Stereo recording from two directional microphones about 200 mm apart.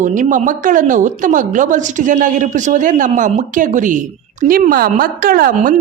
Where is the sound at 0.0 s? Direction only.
40° right (ahead or behind).